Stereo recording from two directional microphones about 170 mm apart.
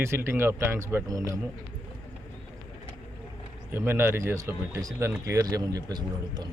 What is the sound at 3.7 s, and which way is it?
A man's voice, 15° right (ahead or behind).